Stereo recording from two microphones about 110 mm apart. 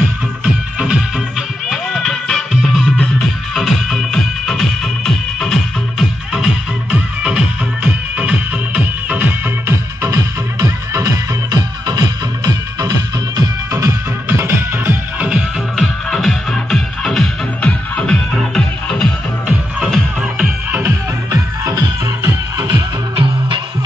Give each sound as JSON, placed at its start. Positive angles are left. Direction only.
{"t": 0.7, "sound": "music", "side_deg": -10}
{"t": 1.7, "sound": "music", "side_deg": 0}
{"t": 14.4, "sound": "music", "side_deg": -25}
{"t": 15.7, "sound": "music", "side_deg": 0}
{"t": 21.3, "sound": "music", "side_deg": -35}